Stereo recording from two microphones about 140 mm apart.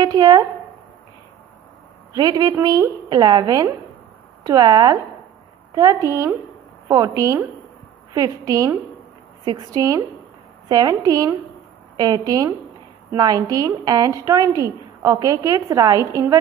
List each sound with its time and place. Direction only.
0.0 s a woman's voice: 30° right (ahead or behind)
2.1 s a woman's voice: 30° right (ahead or behind)